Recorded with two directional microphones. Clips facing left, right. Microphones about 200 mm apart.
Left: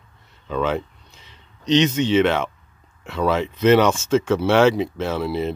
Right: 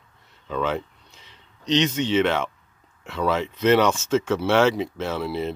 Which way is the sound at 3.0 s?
25° left (ahead or behind).